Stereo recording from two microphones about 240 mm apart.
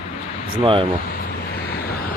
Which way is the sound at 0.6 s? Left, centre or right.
Right.